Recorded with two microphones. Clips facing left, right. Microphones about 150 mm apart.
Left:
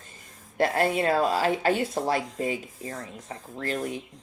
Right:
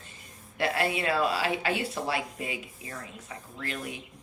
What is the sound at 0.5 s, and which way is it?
Speech, 45° left (ahead or behind).